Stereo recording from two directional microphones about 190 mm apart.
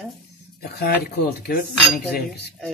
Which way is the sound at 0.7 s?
55° left (ahead or behind).